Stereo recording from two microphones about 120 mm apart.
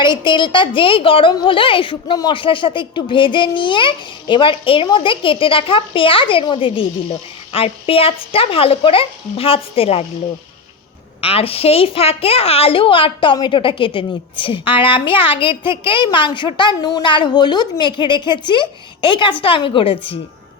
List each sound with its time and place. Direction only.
0.0 s a woman's voice: 40° left (ahead or behind)
11.2 s a woman's voice: 55° left (ahead or behind)